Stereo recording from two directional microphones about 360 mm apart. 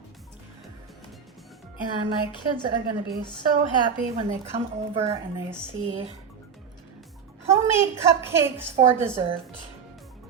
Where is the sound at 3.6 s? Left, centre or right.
Centre.